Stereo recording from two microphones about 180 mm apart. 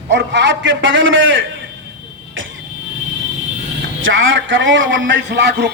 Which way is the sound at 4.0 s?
90° right.